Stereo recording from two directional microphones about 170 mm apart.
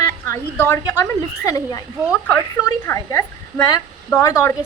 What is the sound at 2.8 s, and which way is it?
Speech, 15° left (ahead or behind).